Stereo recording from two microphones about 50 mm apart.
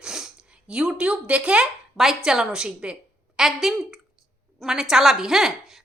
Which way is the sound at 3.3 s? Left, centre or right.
Centre.